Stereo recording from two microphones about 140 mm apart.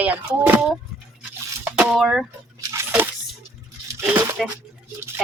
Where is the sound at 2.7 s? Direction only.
15° right (ahead or behind).